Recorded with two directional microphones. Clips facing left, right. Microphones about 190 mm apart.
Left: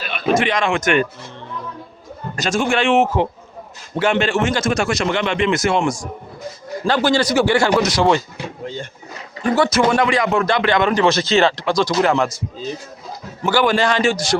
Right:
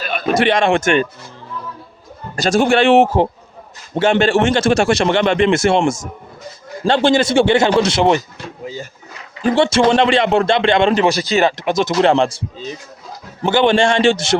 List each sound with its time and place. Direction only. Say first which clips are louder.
0.0 s a sound: right 5 dB; 45° right (ahead or behind)
0.3 s a man's voice: right 6 dB; 35° right (ahead or behind)
2.3 s a man's voice: right 5 dB; 35° right (ahead or behind)
8.6 s speech: right 1 dB; 5° right (ahead or behind)
9.4 s a man's voice: right 3 dB; 30° right (ahead or behind)
11.0 s a man's voice: even; 15° right (ahead or behind)